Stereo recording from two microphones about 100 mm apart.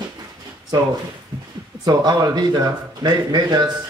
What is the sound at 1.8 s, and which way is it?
A man's voice, 40° right (ahead or behind).